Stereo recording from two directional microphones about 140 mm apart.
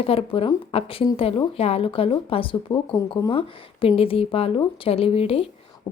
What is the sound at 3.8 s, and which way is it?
A woman's voice, 40° left (ahead or behind).